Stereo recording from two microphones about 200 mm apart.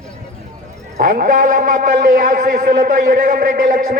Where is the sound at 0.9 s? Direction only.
40° right (ahead or behind).